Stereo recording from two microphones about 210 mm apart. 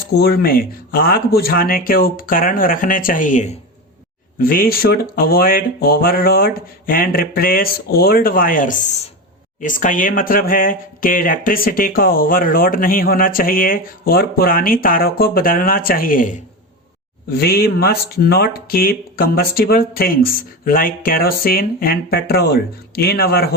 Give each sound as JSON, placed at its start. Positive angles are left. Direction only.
{"t": 0.1, "sound": "speech", "side_deg": 50}
{"t": 17.4, "sound": "speech", "side_deg": 50}